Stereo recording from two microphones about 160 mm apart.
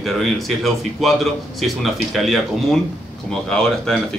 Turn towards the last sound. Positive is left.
turn(degrees=5)  # may be behind; listen again after turning